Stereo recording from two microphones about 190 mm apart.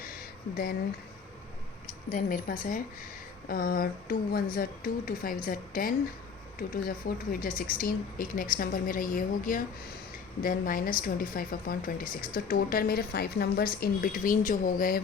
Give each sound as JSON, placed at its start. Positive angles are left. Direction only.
{"t": 0.5, "sound": "speech", "side_deg": 55}
{"t": 2.0, "sound": "speech", "side_deg": 45}